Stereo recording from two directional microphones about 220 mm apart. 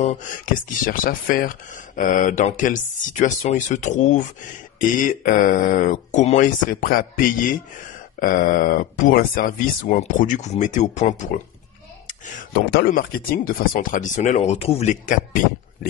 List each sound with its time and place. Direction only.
0.8 s speech: 40° left (ahead or behind)